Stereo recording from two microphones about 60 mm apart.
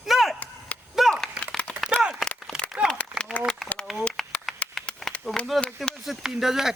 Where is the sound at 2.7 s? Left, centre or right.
Right.